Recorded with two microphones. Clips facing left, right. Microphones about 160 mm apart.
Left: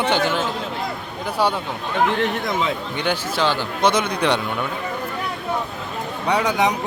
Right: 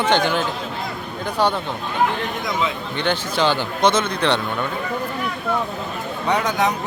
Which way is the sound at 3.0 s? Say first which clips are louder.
Right 3 dB; 5° left (ahead or behind).